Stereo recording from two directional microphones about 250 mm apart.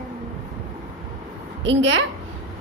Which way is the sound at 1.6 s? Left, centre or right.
Right.